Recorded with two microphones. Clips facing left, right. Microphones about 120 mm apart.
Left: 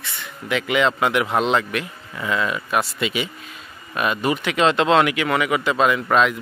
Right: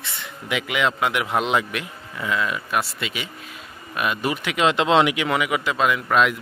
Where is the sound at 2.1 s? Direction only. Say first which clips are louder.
Left 2 dB; centre (ahead or behind).